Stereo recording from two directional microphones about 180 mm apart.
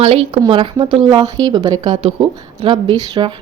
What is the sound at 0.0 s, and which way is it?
A woman's voice, 30° right (ahead or behind).